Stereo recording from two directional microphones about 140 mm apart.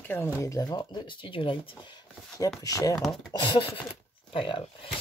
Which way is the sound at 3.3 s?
35° left (ahead or behind).